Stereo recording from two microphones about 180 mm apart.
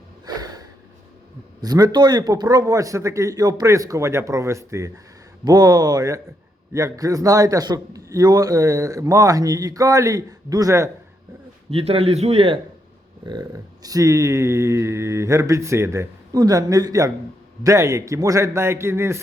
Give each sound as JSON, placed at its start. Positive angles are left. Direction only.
{"t": 0.3, "sound": "a sound", "side_deg": -20}
{"t": 1.6, "sound": "a man's voice", "side_deg": -20}
{"t": 11.7, "sound": "speech", "side_deg": -30}
{"t": 13.2, "sound": "speech", "side_deg": -20}